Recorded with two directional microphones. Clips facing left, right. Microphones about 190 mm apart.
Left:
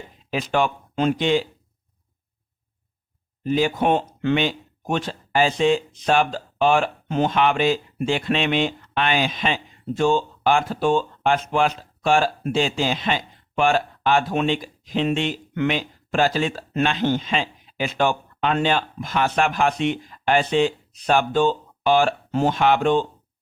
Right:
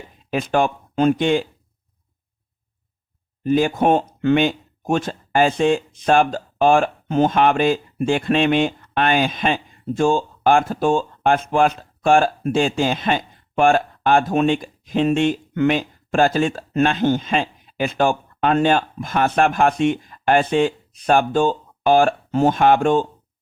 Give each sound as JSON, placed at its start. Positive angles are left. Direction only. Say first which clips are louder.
{"t": 0.3, "sound": "speech", "louder": "right 3 dB", "side_deg": -50}
{"t": 3.4, "sound": "speech", "louder": "right 3 dB", "side_deg": -50}